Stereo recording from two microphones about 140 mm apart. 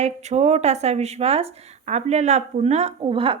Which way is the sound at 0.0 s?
55° right (ahead or behind).